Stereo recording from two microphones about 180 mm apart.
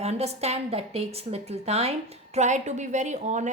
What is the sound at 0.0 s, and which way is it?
A woman's voice, 35° right (ahead or behind).